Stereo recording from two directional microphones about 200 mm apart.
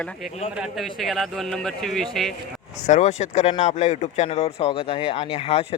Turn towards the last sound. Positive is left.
turn(degrees=30)  # may be behind; listen again after turning